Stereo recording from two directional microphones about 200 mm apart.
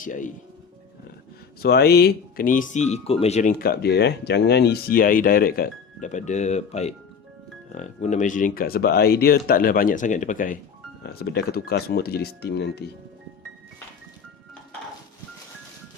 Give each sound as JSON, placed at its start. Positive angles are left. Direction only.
{"t": 0.0, "sound": "speech", "side_deg": 40}
{"t": 1.6, "sound": "speech", "side_deg": 50}
{"t": 3.6, "sound": "speech", "side_deg": 50}
{"t": 11.0, "sound": "speech", "side_deg": 50}